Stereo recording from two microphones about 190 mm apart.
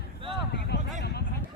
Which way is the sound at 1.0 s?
60° left (ahead or behind).